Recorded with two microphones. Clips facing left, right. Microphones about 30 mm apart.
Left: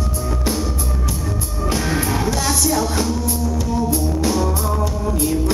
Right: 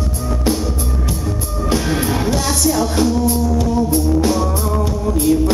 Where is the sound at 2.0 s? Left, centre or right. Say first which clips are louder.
Right 2 dB; centre.